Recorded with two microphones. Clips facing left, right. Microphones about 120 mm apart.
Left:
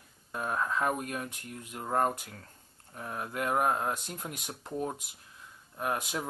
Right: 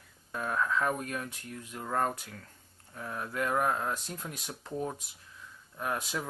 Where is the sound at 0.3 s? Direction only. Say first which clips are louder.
Right 1 dB; 30° left (ahead or behind).